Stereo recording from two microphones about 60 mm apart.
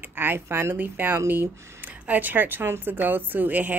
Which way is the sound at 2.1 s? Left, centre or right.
Right.